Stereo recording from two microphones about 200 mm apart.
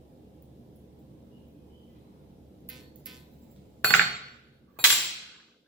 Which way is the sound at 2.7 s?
Centre (ahead or behind).